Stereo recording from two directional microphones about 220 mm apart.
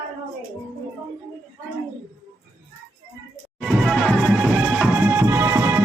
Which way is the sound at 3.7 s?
Centre (ahead or behind).